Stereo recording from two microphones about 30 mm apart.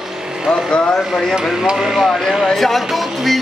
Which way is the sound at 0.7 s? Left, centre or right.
Left.